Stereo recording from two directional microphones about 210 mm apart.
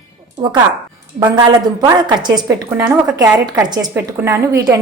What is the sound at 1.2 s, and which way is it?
A woman's voice, 20° right (ahead or behind).